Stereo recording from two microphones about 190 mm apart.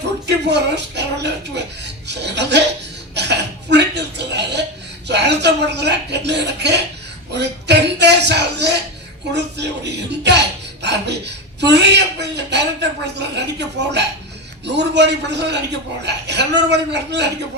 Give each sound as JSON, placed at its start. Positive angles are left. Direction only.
{"t": 0.3, "sound": "speech", "side_deg": -65}
{"t": 3.2, "sound": "throat clearing", "side_deg": -65}
{"t": 5.0, "sound": "speech", "side_deg": -65}